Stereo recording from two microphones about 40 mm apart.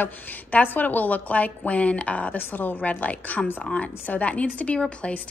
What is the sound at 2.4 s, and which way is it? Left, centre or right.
Speech, left.